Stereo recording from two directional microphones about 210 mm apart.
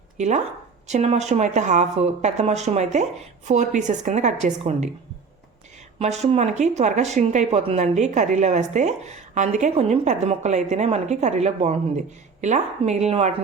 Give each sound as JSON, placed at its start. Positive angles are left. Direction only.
{"t": 0.2, "sound": "speech", "side_deg": -35}
{"t": 6.0, "sound": "speech", "side_deg": -30}